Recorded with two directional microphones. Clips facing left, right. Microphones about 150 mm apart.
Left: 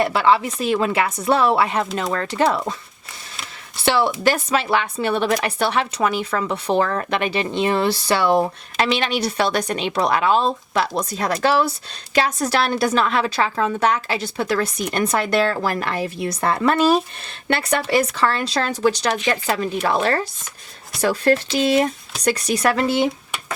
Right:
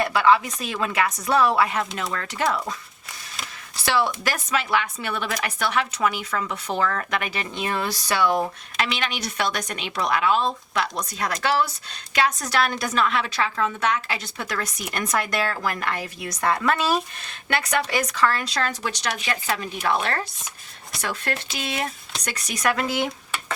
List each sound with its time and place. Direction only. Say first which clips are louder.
0.0 s speech: left 2 dB; 25° left (ahead or behind)
3.8 s speech: left 6 dB; 25° left (ahead or behind)